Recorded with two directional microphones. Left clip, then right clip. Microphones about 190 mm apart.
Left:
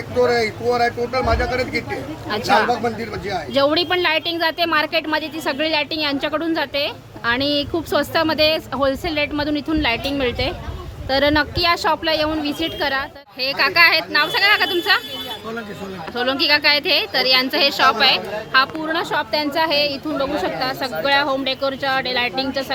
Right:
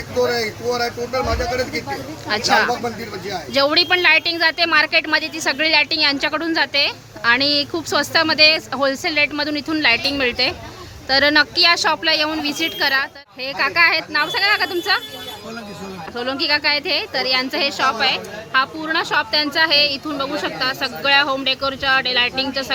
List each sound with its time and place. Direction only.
0.2 s speech: 5° left (ahead or behind)
16.1 s speech: 5° right (ahead or behind)